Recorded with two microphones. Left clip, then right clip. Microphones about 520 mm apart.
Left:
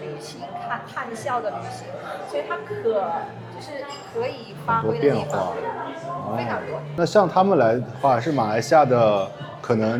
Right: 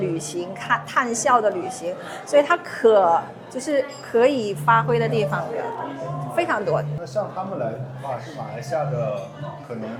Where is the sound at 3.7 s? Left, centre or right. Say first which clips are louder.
Right 9 dB; right.